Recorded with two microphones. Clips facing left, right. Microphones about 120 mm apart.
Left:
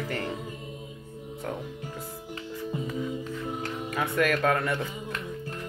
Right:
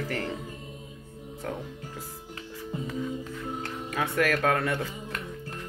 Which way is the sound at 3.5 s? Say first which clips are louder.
Even; 15° left (ahead or behind).